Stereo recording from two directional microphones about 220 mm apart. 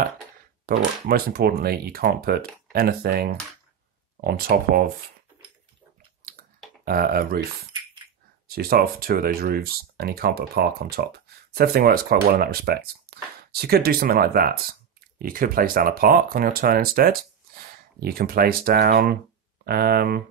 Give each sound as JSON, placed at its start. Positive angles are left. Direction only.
{"t": 0.7, "sound": "speech", "side_deg": -45}
{"t": 6.8, "sound": "speech", "side_deg": -40}
{"t": 8.5, "sound": "speech", "side_deg": -45}